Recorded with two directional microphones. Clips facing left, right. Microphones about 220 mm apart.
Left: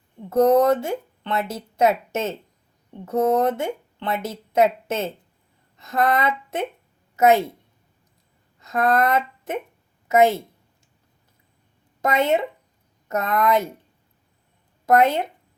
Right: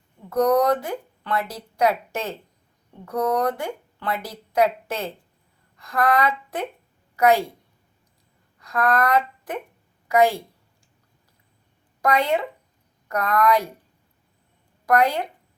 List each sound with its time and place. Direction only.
0.3 s a woman's voice: 25° left (ahead or behind)
8.5 s speech: 25° left (ahead or behind)
12.0 s speech: 25° left (ahead or behind)
14.8 s speech: 25° left (ahead or behind)